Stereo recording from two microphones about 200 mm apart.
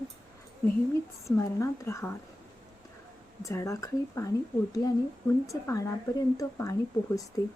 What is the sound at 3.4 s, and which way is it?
Speech, 15° left (ahead or behind).